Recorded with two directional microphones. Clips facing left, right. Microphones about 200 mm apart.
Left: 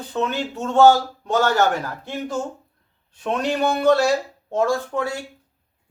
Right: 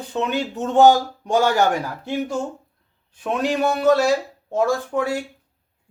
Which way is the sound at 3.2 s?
5° right (ahead or behind).